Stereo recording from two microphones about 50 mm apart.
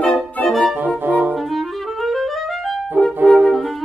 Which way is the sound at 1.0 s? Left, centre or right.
Right.